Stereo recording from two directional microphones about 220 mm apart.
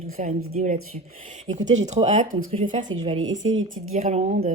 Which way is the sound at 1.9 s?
30° right (ahead or behind).